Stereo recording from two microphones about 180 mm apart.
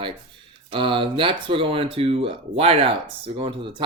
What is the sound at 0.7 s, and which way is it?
Speech, 30° right (ahead or behind).